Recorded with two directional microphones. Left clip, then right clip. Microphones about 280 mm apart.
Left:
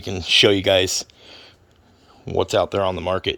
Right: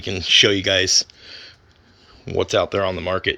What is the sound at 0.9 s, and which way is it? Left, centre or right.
Speech, left.